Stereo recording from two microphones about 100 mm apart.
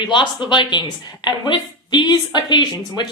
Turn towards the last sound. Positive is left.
turn(degrees=45)  # may be behind; listen again after turning